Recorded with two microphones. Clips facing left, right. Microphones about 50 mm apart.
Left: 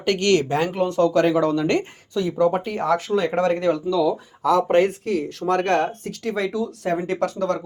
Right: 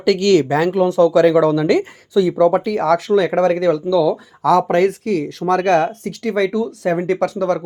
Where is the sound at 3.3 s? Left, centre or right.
Right.